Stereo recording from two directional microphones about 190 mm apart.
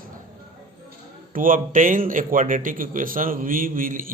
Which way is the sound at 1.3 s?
45° right (ahead or behind).